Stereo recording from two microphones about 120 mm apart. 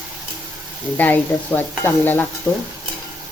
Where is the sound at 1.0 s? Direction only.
15° left (ahead or behind).